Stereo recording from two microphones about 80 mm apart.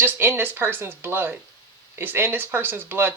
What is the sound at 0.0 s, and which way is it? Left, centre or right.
Speech, right.